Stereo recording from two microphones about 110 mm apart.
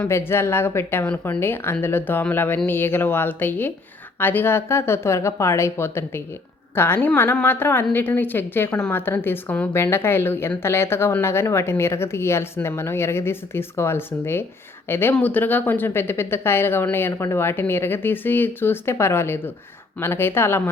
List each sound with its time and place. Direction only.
0.0 s a woman's voice: 20° left (ahead or behind)